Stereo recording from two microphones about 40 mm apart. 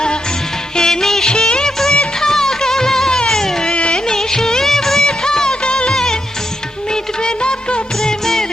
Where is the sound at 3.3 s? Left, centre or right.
Centre.